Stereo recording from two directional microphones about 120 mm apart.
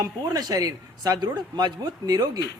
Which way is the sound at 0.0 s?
30° right (ahead or behind).